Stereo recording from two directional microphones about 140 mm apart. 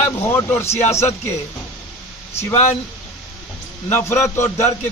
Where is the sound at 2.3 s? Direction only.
50° left (ahead or behind).